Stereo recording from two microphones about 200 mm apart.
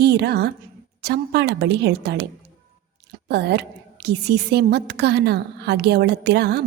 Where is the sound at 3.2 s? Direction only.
55° right (ahead or behind).